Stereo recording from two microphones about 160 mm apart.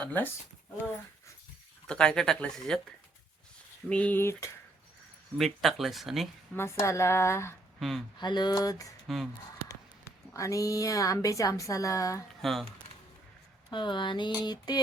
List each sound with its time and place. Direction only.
0.0 s speech: 10° left (ahead or behind)
1.9 s speech: 5° left (ahead or behind)
3.8 s speech: 10° left (ahead or behind)
5.4 s speech: centre (ahead or behind)
6.5 s speech: 15° left (ahead or behind)
7.8 s speech: centre (ahead or behind)
8.2 s a woman's voice: 25° left (ahead or behind)
9.0 s speech: centre (ahead or behind)
10.3 s a woman's voice: 20° left (ahead or behind)
12.4 s speech: centre (ahead or behind)
13.7 s a woman's voice: 30° left (ahead or behind)